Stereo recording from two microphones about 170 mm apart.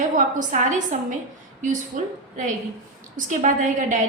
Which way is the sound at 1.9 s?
50° right (ahead or behind).